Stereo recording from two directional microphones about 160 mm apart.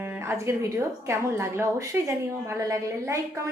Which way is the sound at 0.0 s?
15° right (ahead or behind).